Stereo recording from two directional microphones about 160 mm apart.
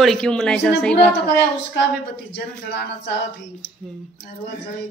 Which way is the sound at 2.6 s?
90° left.